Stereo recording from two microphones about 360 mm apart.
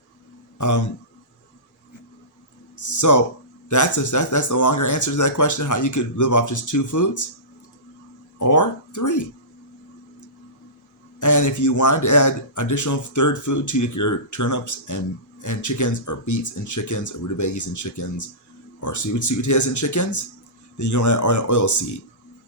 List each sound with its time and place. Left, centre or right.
0.6 s speech: left
2.8 s speech: left
8.4 s speech: left
11.2 s speech: left